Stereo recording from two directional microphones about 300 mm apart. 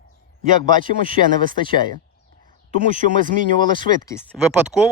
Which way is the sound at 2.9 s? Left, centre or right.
Right.